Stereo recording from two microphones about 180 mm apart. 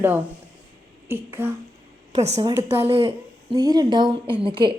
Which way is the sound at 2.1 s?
35° right (ahead or behind).